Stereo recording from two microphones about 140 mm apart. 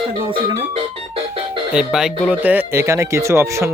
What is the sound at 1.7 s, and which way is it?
Speech, 5° right (ahead or behind).